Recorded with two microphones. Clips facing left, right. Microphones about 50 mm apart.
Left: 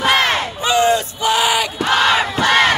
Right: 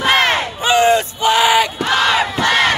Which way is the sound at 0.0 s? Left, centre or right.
Right.